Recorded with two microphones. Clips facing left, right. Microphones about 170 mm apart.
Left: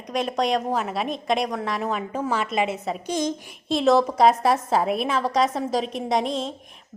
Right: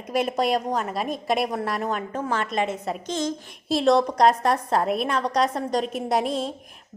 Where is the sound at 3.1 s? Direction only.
15° left (ahead or behind).